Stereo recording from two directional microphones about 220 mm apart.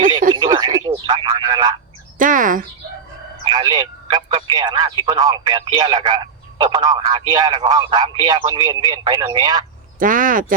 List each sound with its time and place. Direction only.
0.3 s radio: 20° right (ahead or behind)
2.1 s speech: 35° right (ahead or behind)
3.4 s speech: 20° right (ahead or behind)
10.0 s speech: 35° right (ahead or behind)